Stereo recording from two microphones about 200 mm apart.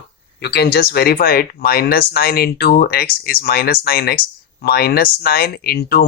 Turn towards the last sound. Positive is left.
turn(degrees=50)  # may be behind; listen again after turning